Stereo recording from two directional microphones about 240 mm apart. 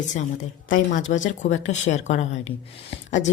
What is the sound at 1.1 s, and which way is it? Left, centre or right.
Speech, left.